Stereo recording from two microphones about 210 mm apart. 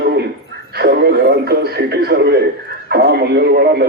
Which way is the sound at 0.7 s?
50° right (ahead or behind).